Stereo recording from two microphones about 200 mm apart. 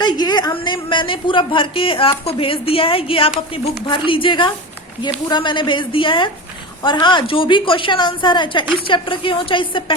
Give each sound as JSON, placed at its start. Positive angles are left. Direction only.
{"t": 0.0, "sound": "a woman's voice", "side_deg": 20}